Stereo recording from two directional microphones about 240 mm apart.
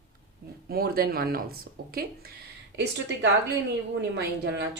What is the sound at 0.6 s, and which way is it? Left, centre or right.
Speech, right.